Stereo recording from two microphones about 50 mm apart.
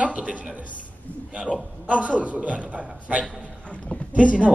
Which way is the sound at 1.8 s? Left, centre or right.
Right.